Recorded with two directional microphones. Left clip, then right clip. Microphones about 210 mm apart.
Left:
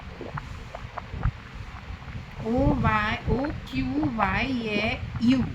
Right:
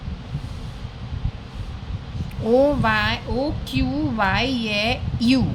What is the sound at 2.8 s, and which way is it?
A woman's voice, 30° right (ahead or behind).